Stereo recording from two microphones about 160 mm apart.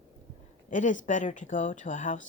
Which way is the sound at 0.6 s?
50° left (ahead or behind).